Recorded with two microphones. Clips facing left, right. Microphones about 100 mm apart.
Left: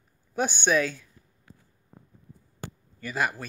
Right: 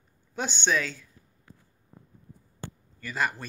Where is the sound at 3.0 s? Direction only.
15° left (ahead or behind).